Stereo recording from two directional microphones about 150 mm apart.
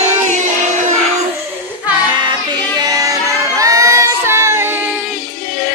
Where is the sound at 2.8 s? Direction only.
25° right (ahead or behind).